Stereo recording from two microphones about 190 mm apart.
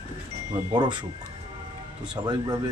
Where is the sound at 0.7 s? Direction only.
25° right (ahead or behind).